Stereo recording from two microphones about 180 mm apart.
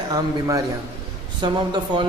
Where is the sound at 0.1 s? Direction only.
20° right (ahead or behind).